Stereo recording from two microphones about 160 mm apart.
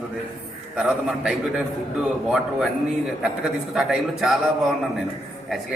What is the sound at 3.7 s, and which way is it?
Speech, centre (ahead or behind).